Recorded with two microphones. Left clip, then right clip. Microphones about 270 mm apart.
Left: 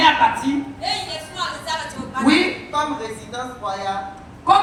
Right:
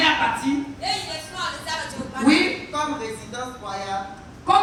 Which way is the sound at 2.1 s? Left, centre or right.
Centre.